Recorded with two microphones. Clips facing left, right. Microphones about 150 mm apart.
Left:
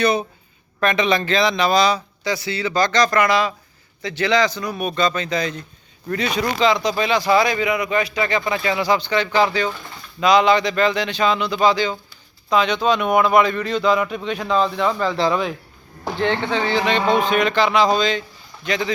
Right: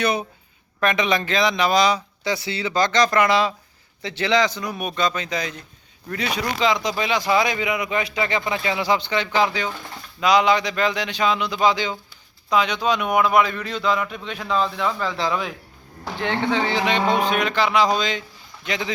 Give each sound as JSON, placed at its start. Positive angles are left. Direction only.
{"t": 0.0, "sound": "speech", "side_deg": -10}